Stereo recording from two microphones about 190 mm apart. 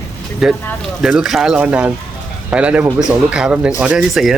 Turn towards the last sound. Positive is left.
turn(degrees=0)  # may be behind; listen again after turning